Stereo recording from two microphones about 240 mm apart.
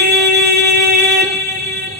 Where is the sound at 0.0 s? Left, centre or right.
Right.